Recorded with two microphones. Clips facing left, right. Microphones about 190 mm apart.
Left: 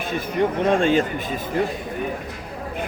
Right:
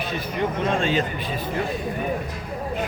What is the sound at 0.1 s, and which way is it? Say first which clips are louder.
A man's voice: left 6 dB; 55° left (ahead or behind).